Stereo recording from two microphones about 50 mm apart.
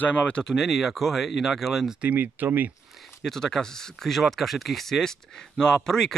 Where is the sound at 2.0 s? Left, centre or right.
Right.